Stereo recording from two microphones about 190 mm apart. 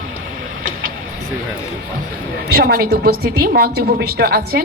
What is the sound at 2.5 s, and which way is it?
A woman's voice, 55° right (ahead or behind).